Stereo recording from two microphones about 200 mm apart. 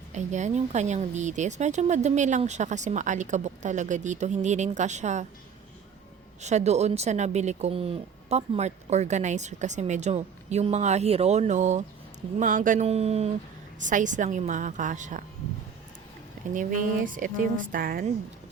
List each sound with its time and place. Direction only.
0.1 s speech: 35° right (ahead or behind)
6.4 s speech: 35° right (ahead or behind)
16.6 s a woman's voice: 40° right (ahead or behind)